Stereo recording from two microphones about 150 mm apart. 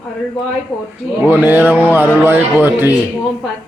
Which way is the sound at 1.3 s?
10° right (ahead or behind).